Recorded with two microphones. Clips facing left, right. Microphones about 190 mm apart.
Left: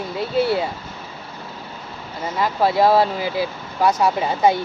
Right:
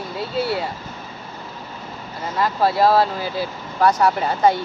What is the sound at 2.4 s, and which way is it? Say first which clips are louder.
Speech: even; 15° left (ahead or behind).